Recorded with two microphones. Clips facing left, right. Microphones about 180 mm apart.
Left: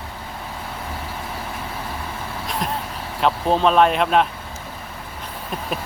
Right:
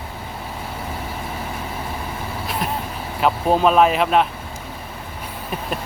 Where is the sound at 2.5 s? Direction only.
5° right (ahead or behind).